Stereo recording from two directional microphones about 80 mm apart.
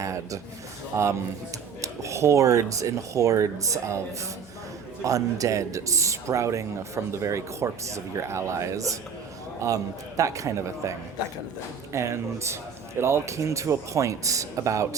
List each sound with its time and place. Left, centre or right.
0.0 s a man's voice: right